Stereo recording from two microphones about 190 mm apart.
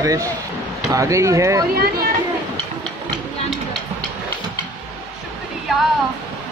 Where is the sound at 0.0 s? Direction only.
15° right (ahead or behind).